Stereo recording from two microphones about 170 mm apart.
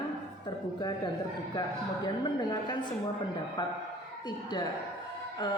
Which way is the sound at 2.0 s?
25° left (ahead or behind).